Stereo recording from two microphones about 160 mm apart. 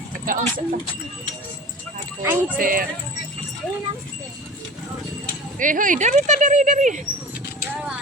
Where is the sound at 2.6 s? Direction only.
60° right (ahead or behind).